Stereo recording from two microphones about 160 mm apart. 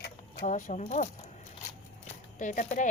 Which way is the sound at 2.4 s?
50° left (ahead or behind).